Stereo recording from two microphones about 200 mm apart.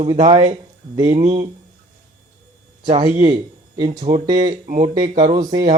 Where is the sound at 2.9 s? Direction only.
25° right (ahead or behind).